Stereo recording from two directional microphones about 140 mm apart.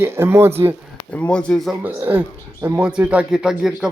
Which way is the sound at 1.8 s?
15° right (ahead or behind).